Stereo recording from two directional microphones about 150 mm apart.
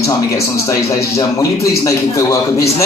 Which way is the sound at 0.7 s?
20° left (ahead or behind).